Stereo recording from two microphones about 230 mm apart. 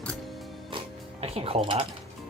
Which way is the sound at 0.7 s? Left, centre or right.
Right.